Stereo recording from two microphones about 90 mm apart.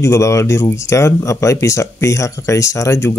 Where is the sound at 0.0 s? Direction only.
35° left (ahead or behind).